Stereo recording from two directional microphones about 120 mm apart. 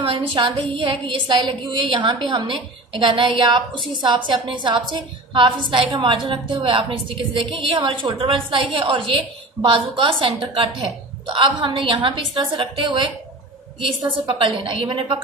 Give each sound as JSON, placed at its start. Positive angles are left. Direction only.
{"t": 0.0, "sound": "a woman's voice", "side_deg": -50}